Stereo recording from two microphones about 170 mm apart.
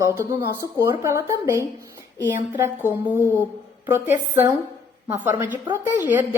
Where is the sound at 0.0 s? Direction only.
15° right (ahead or behind).